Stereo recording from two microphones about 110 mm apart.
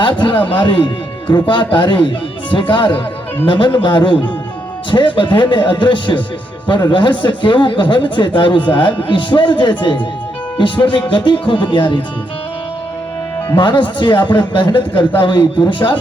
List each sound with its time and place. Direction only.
0.0 s speech: 50° left (ahead or behind)
13.6 s speech: 45° left (ahead or behind)